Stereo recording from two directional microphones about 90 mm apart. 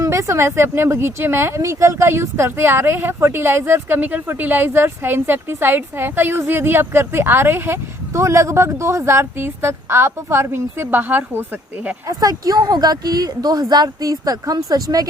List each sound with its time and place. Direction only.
0.0 s speech: 35° right (ahead or behind)
12.0 s speech: 45° right (ahead or behind)